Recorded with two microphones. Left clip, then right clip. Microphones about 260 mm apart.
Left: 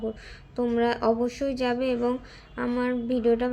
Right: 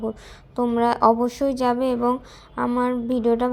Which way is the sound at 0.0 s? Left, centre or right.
Centre.